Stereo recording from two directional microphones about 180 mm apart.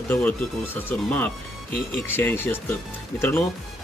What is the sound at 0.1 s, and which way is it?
Speech, 10° left (ahead or behind).